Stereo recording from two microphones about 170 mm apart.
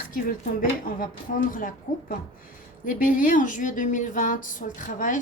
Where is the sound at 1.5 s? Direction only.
50° left (ahead or behind).